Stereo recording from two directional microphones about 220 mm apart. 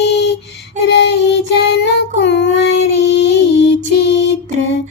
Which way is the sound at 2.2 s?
50° left (ahead or behind).